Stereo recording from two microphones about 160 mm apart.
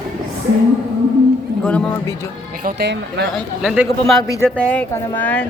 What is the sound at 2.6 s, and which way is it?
Speech, 75° right (ahead or behind).